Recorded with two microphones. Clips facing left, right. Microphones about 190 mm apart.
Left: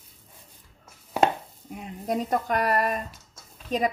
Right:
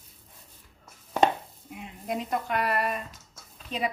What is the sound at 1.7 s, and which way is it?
A woman's voice, 40° left (ahead or behind).